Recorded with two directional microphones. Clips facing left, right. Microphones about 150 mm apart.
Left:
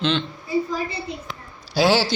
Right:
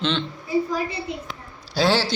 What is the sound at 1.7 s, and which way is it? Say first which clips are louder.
Speech: left 2 dB; 5° left (ahead or behind).